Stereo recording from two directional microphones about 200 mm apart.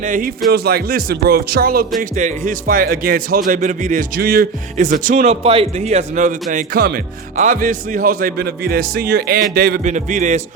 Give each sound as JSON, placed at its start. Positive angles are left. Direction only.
{"t": 0.0, "sound": "speech", "side_deg": -40}
{"t": 5.2, "sound": "a man's voice", "side_deg": -30}